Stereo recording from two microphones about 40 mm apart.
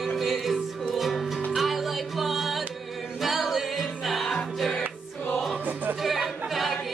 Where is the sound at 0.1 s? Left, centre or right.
Centre.